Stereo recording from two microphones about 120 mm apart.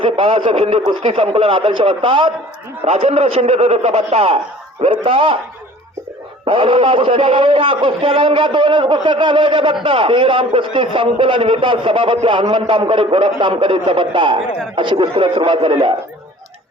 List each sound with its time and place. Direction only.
0.0 s a man's voice: 50° right (ahead or behind)
2.8 s a man's voice: 65° right (ahead or behind); by 5.4 s 45° right (ahead or behind)
6.4 s a man's voice: 50° right (ahead or behind)